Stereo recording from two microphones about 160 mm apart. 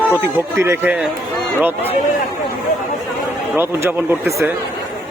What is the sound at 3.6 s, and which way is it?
Speech, 15° right (ahead or behind).